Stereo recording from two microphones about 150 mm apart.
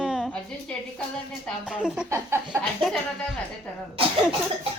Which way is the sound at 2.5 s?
Centre (ahead or behind).